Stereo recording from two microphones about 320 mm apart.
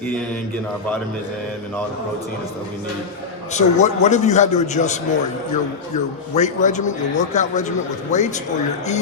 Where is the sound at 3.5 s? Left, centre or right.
Left.